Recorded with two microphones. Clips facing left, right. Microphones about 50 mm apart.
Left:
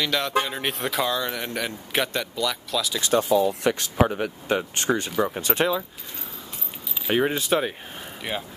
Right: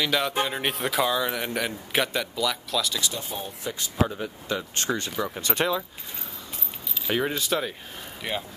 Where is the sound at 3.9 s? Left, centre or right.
Left.